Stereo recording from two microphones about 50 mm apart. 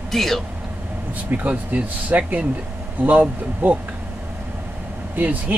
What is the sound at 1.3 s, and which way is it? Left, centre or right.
Speech, right.